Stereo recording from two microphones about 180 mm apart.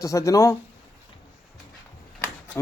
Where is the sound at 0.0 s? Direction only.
20° left (ahead or behind).